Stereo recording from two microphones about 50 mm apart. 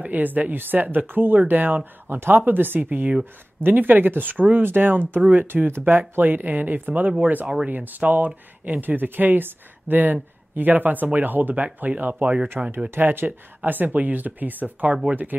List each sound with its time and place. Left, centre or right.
0.0 s speech: right